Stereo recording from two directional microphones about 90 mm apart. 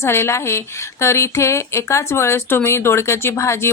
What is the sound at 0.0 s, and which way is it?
A woman's voice, 30° left (ahead or behind).